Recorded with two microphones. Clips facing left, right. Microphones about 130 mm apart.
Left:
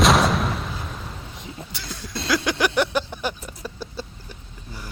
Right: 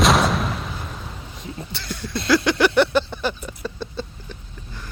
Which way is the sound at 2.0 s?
Centre (ahead or behind).